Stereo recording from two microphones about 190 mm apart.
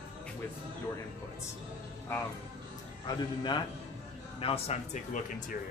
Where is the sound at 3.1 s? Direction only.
20° left (ahead or behind).